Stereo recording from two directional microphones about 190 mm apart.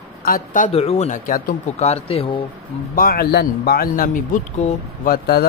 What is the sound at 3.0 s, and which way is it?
Speech, 50° left (ahead or behind).